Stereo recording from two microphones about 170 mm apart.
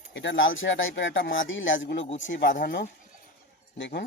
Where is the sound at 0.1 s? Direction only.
90° left.